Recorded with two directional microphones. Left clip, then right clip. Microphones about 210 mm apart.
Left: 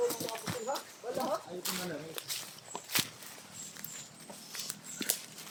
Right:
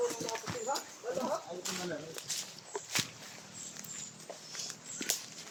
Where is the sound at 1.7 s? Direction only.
40° left (ahead or behind).